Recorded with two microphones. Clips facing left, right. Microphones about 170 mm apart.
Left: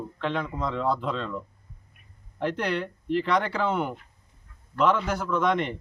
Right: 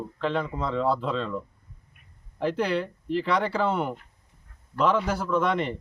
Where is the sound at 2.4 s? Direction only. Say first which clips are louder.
Right 2 dB; 5° right (ahead or behind).